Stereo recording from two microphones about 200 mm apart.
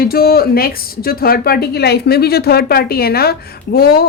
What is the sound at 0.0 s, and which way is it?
Speech, 50° left (ahead or behind).